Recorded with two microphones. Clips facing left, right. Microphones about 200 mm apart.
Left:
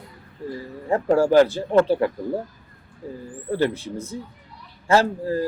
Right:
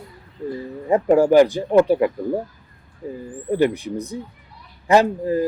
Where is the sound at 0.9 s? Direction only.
15° right (ahead or behind).